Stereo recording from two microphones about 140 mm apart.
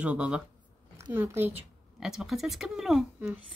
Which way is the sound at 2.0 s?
5° right (ahead or behind).